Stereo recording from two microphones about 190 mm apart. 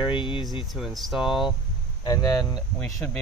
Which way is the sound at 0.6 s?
Centre (ahead or behind).